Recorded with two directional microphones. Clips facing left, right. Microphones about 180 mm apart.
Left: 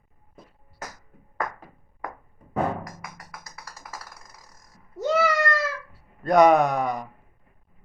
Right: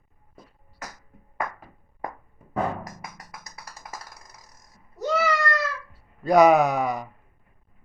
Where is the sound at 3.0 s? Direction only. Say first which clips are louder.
Even; 20° right (ahead or behind).